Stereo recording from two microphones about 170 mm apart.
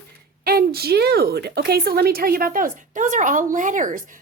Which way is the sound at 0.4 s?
65° right (ahead or behind).